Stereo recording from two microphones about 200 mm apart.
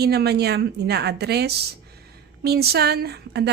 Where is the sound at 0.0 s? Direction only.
55° right (ahead or behind).